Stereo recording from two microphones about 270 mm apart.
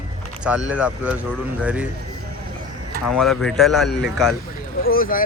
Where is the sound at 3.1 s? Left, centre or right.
Centre.